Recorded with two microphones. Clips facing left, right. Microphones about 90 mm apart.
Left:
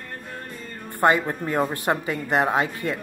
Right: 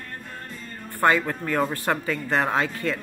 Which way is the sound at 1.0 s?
20° left (ahead or behind).